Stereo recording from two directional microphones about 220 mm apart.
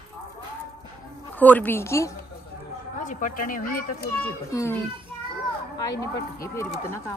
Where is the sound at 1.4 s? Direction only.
10° left (ahead or behind).